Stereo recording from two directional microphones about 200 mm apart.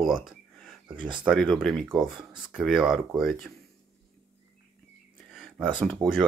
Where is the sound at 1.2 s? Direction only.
Centre (ahead or behind).